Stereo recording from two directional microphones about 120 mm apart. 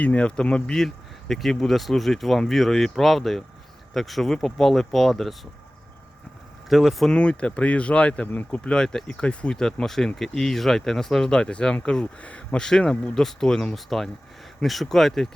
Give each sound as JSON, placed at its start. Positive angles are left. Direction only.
{"t": 0.0, "sound": "speech", "side_deg": 10}
{"t": 6.7, "sound": "speech", "side_deg": 0}